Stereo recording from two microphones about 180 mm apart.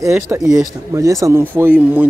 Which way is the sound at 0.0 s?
15° right (ahead or behind).